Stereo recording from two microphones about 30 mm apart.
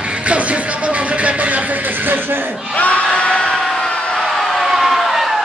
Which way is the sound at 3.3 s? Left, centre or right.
Centre.